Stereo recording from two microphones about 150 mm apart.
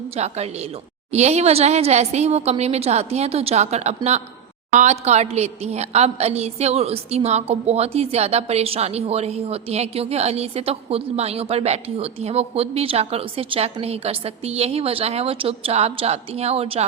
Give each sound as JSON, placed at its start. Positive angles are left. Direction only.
{"t": 0.2, "sound": "a woman's voice", "side_deg": -45}